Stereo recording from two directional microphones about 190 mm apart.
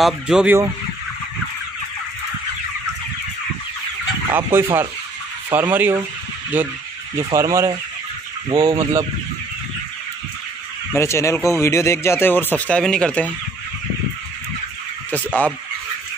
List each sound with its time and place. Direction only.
0.0 s fowl: 5° right (ahead or behind)
4.3 s speech: 10° right (ahead or behind)
10.9 s speech: 15° left (ahead or behind)